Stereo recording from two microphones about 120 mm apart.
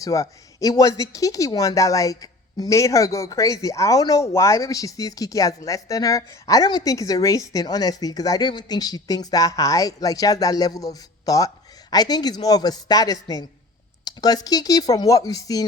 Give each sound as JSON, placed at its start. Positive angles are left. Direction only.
{"t": 0.0, "sound": "speech", "side_deg": 25}